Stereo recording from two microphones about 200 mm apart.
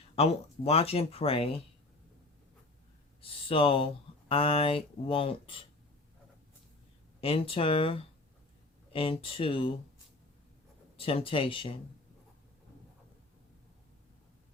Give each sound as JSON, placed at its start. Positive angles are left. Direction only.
{"t": 0.2, "sound": "speech", "side_deg": 30}
{"t": 3.2, "sound": "speech", "side_deg": 25}
{"t": 7.2, "sound": "speech", "side_deg": 30}
{"t": 10.9, "sound": "speech", "side_deg": 30}